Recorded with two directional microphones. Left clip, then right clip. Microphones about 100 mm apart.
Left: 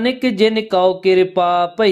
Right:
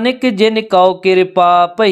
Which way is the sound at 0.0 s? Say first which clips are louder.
Right 3 dB; 30° right (ahead or behind).